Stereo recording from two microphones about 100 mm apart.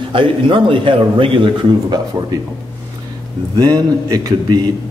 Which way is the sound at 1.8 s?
40° right (ahead or behind).